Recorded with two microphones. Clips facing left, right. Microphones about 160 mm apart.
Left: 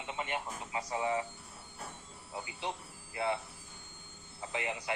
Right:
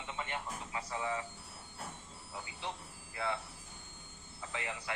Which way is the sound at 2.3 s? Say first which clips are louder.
Left 4 dB; 20° left (ahead or behind).